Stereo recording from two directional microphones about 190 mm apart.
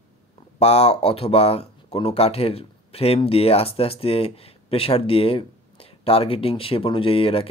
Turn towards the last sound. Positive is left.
turn(degrees=30)  # may be behind; listen again after turning